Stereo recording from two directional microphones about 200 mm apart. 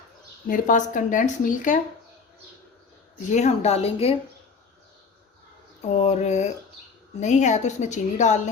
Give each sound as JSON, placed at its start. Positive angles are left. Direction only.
{"t": 0.4, "sound": "speech", "side_deg": 40}
{"t": 3.2, "sound": "speech", "side_deg": 35}
{"t": 5.9, "sound": "speech", "side_deg": 35}